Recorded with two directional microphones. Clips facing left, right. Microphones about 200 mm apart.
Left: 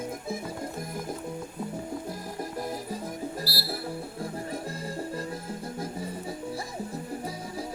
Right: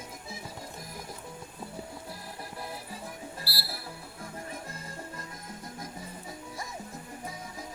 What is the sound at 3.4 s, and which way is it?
Music, 40° left (ahead or behind).